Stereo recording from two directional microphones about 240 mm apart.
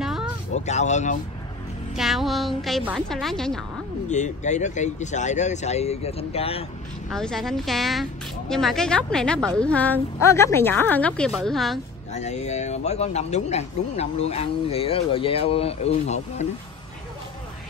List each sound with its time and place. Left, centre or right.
0.0 s a sound: centre
0.7 s speech: left
2.0 s a woman's voice: centre
4.1 s speech: left
7.1 s a woman's voice: centre
12.1 s speech: left